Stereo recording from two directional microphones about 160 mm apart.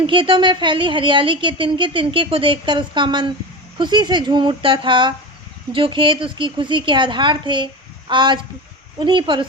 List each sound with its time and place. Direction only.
0.0 s a woman's voice: 30° right (ahead or behind)